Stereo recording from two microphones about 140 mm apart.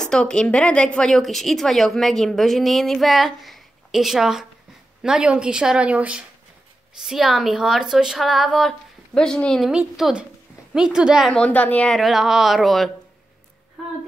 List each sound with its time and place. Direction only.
0.0 s a woman's voice: 5° left (ahead or behind)
11.3 s a woman's voice: 10° left (ahead or behind)